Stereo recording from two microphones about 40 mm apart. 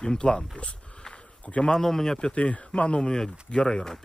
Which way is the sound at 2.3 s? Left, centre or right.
Left.